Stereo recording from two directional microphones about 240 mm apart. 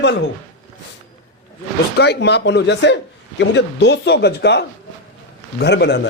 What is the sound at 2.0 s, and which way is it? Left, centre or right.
Speech, left.